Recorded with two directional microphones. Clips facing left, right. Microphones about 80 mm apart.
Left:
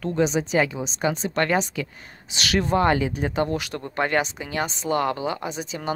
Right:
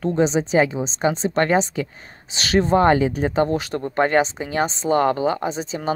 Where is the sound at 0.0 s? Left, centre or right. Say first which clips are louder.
Right 3 dB; right.